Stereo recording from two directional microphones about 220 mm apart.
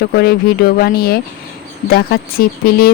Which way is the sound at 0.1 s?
45° left (ahead or behind).